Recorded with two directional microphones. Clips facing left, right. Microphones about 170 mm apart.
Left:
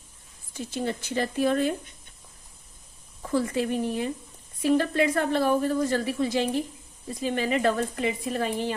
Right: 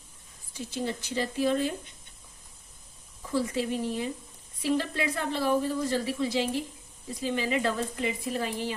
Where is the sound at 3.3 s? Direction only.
55° left (ahead or behind).